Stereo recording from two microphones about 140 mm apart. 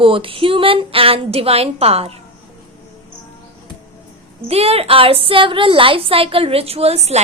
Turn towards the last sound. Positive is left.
turn(degrees=-50)  # may be behind; listen again after turning